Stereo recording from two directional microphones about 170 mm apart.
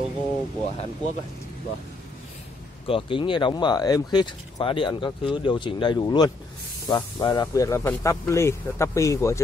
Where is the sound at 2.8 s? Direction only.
30° left (ahead or behind).